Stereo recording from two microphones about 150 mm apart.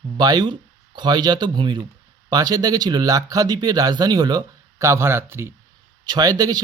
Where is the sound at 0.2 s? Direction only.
25° right (ahead or behind).